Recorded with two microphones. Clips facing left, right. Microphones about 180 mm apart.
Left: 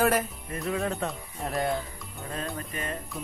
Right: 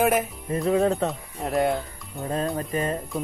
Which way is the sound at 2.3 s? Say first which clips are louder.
Right 9 dB; 30° right (ahead or behind).